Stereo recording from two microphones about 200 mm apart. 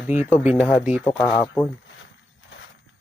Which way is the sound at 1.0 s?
15° left (ahead or behind).